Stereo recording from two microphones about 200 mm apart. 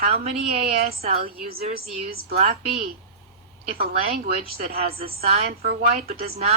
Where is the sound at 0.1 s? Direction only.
30° right (ahead or behind).